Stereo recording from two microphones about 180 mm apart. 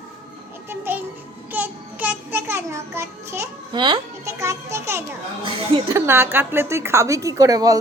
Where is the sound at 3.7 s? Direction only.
25° right (ahead or behind).